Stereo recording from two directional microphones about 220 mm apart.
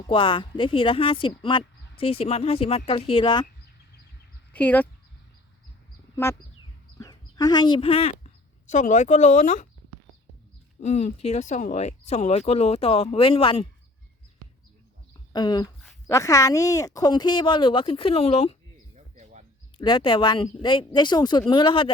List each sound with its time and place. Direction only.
0.1 s speech: 20° left (ahead or behind)
4.5 s speech: 5° left (ahead or behind)
7.0 s speech: 15° left (ahead or behind); by 9.6 s 35° left (ahead or behind)
10.8 s speech: 30° left (ahead or behind)
15.3 s speech: 20° left (ahead or behind)
18.9 s a sound: 30° right (ahead or behind)
19.8 s speech: 20° left (ahead or behind)